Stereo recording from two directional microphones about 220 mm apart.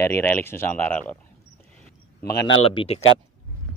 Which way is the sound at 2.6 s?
25° left (ahead or behind).